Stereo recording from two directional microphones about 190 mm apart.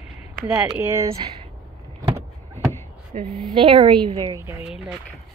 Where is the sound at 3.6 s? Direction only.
25° right (ahead or behind).